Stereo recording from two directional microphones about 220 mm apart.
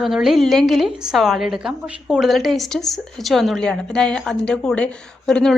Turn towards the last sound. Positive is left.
turn(degrees=5)  # may be behind; listen again after turning